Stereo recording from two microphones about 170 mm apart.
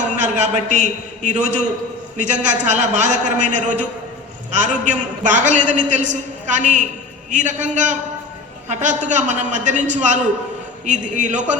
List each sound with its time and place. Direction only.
0.2 s a man's voice: 45° right (ahead or behind)